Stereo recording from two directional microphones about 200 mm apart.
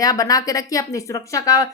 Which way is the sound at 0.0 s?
20° left (ahead or behind).